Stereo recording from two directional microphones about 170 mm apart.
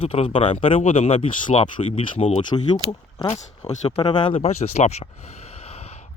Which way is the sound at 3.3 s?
40° left (ahead or behind).